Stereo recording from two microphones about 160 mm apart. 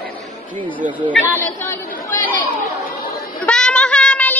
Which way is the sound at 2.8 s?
65° left (ahead or behind).